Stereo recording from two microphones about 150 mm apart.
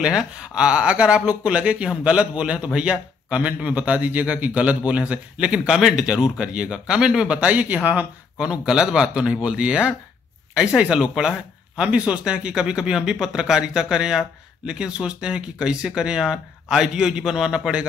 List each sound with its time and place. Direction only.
0.0 s speech: 5° right (ahead or behind)